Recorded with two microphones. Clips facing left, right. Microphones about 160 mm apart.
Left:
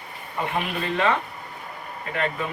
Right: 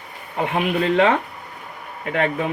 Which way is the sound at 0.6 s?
70° right (ahead or behind).